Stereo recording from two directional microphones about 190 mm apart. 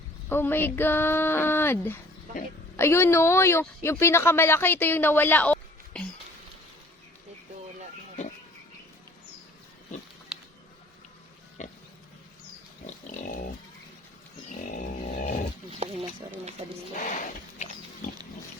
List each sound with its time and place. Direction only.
0.3 s speech: 10° left (ahead or behind)
11.6 s pig: 40° left (ahead or behind)
13.1 s pig: 45° left (ahead or behind)
14.6 s a sound: 40° left (ahead or behind)
17.0 s pig: 40° left (ahead or behind)